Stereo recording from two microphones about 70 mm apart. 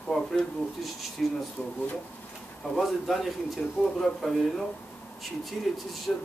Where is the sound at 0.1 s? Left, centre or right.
Centre.